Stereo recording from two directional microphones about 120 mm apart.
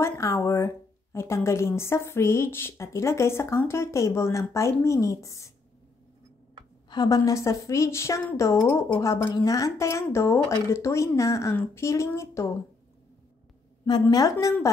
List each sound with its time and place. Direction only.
0.0 s a woman's voice: 25° left (ahead or behind)
6.9 s a woman's voice: 30° left (ahead or behind)